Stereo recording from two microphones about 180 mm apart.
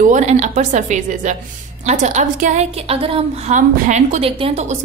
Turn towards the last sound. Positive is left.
turn(degrees=-35)  # may be behind; listen again after turning